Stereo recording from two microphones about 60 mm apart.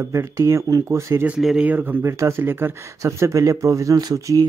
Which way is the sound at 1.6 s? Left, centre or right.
Right.